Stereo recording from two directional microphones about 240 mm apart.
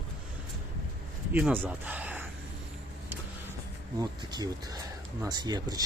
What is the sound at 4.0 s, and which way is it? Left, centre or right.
Speech, centre.